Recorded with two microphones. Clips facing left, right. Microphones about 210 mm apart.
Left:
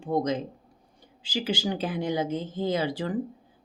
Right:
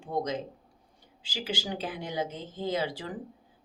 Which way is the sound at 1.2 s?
50° left (ahead or behind).